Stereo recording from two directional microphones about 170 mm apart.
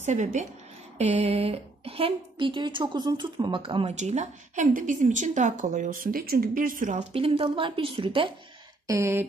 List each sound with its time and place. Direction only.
0.0 s a woman's voice: 45° right (ahead or behind)
8.8 s speech: 15° right (ahead or behind)